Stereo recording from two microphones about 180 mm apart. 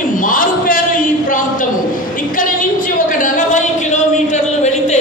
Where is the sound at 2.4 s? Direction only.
50° left (ahead or behind).